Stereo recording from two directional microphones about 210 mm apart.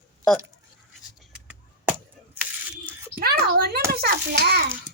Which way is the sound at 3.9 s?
50° right (ahead or behind).